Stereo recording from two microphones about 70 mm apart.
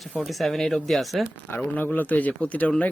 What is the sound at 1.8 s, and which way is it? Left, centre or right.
Speech, left.